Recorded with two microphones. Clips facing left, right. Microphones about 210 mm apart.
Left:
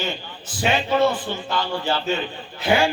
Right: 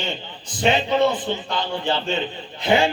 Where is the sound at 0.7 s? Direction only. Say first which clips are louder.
Even; 20° right (ahead or behind).